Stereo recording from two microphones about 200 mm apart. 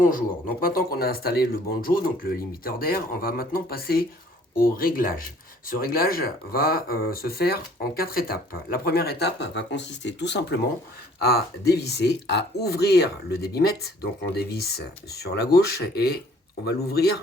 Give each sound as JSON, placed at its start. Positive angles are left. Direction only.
{"t": 0.0, "sound": "speech", "side_deg": 45}